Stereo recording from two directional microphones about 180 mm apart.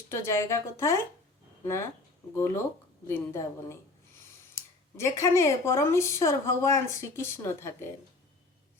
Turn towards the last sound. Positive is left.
turn(degrees=15)  # may be behind; listen again after turning